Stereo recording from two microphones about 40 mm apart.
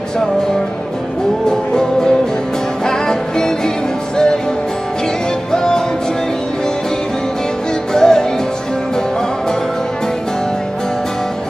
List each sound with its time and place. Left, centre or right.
2.9 s music: centre
5.5 s music: centre
7.9 s music: centre